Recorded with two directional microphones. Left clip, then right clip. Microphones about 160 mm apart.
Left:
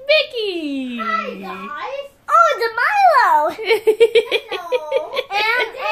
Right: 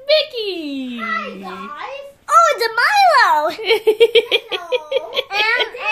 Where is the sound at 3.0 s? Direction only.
20° right (ahead or behind).